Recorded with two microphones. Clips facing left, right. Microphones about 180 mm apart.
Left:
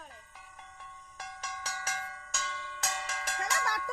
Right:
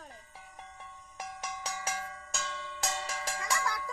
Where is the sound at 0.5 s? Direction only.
20° right (ahead or behind).